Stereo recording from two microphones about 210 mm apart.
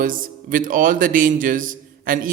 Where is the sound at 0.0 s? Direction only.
40° right (ahead or behind).